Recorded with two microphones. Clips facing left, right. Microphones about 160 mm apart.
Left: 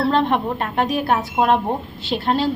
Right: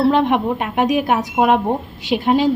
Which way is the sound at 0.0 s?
15° right (ahead or behind).